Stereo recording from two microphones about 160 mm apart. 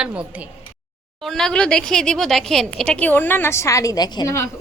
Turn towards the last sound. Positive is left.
turn(degrees=20)  # may be behind; listen again after turning